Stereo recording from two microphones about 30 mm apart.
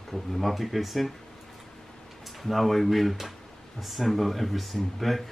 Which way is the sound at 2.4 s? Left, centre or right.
Centre.